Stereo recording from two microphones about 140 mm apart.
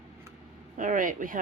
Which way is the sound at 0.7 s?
70° right (ahead or behind).